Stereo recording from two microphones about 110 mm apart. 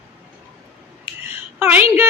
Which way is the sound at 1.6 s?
20° right (ahead or behind).